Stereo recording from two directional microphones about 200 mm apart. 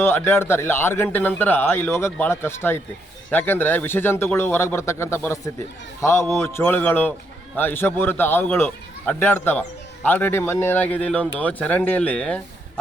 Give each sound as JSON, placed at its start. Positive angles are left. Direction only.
{"t": 0.0, "sound": "a man's voice", "side_deg": 10}